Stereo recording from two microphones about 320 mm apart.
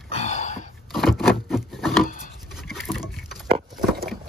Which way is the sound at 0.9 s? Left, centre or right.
Centre.